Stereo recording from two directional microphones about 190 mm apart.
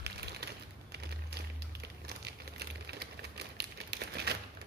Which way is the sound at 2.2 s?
60° right (ahead or behind).